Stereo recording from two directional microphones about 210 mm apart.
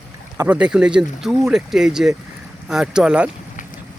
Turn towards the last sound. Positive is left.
turn(degrees=-5)  # may be behind; listen again after turning